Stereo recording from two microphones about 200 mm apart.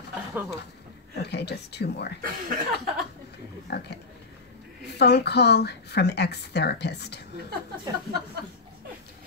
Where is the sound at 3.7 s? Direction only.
55° left (ahead or behind).